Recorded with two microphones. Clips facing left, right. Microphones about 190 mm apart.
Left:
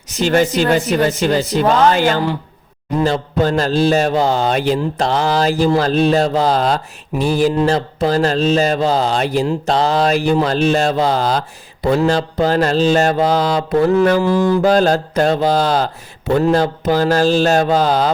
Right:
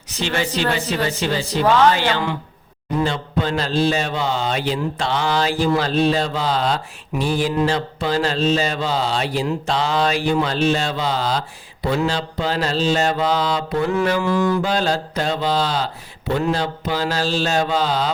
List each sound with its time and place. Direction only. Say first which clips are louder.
0.2 s a man's voice: left 8 dB; 45° left (ahead or behind)
14.7 s a man's voice: left 7 dB; 45° left (ahead or behind)